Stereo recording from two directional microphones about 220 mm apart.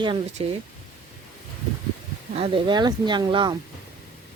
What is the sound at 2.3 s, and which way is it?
Speech, 25° right (ahead or behind).